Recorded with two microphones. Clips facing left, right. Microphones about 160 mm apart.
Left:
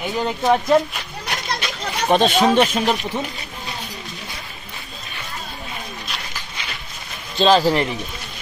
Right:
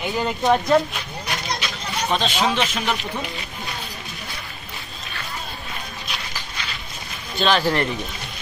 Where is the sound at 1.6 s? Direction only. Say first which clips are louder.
Left 3 dB; 55° left (ahead or behind).